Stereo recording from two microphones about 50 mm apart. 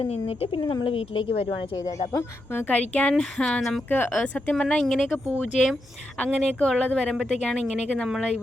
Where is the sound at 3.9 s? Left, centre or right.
Left.